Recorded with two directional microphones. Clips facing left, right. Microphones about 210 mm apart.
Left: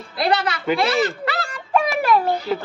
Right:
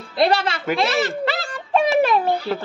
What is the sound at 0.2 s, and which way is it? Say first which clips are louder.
Speech: right 2 dB; 25° right (ahead or behind).